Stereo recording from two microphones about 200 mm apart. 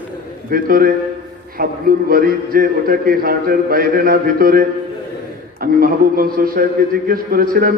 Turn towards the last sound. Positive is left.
turn(degrees=-45)  # may be behind; listen again after turning